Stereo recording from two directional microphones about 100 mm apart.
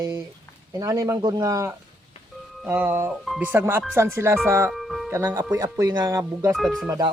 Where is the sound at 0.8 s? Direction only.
35° right (ahead or behind).